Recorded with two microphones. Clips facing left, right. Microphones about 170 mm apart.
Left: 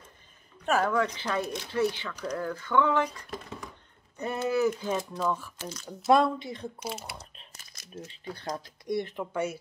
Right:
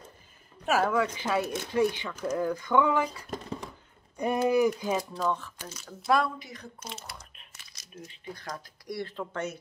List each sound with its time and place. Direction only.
0.7 s speech: 5° right (ahead or behind)
3.3 s a sound: 35° right (ahead or behind)
4.2 s speech: 15° right (ahead or behind)
5.1 s speech: 5° left (ahead or behind)
5.6 s speech: 10° right (ahead or behind)
5.9 s a woman's voice: 20° left (ahead or behind)
6.8 s speech: 5° left (ahead or behind)
7.2 s a sound: 35° left (ahead or behind)
7.9 s speech: 30° left (ahead or behind)
8.5 s speech: 20° left (ahead or behind)